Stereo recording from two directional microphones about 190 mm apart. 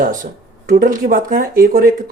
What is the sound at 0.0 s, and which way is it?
Speech, 45° right (ahead or behind).